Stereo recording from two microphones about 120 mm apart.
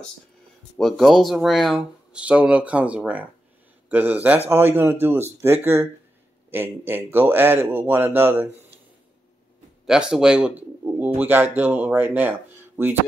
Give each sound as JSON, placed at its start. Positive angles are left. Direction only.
{"t": 0.7, "sound": "speech", "side_deg": 0}
{"t": 9.8, "sound": "speech", "side_deg": -5}